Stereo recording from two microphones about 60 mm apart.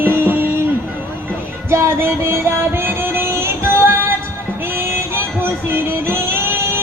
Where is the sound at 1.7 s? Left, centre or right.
Right.